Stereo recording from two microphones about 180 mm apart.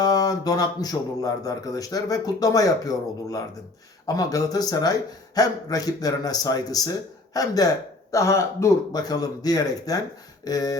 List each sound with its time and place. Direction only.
0.0 s speech: 20° left (ahead or behind)